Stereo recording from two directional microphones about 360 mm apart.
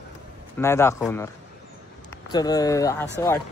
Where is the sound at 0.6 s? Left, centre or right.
Centre.